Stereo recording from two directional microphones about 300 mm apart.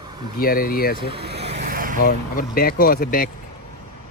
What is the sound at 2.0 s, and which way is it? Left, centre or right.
Speech, left.